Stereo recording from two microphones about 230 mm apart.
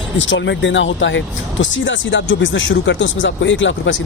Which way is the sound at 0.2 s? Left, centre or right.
Left.